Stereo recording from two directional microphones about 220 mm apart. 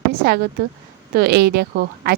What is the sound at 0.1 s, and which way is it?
Speech, 45° right (ahead or behind).